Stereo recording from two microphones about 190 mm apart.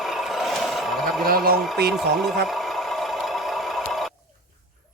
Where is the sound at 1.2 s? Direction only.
50° right (ahead or behind).